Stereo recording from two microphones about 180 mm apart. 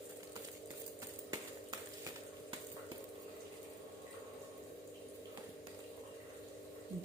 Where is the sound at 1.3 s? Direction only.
20° right (ahead or behind).